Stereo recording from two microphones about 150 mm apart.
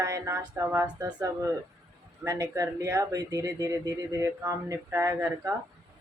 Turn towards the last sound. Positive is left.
turn(degrees=-15)  # may be behind; listen again after turning